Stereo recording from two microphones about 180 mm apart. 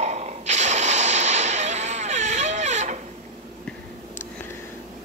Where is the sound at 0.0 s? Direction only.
40° right (ahead or behind).